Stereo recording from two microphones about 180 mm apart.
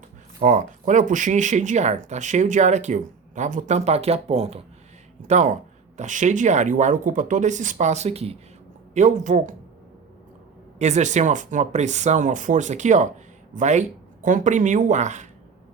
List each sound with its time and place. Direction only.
0.3 s speech: 45° right (ahead or behind)
10.8 s speech: 40° right (ahead or behind)